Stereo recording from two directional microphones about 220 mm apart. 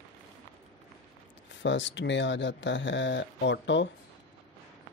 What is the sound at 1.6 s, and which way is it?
Speech, 55° left (ahead or behind).